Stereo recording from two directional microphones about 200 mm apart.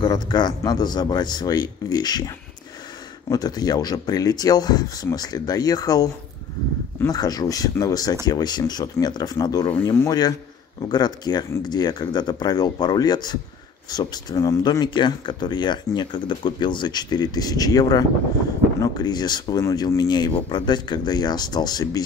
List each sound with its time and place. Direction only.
0.0 s speech: 20° left (ahead or behind)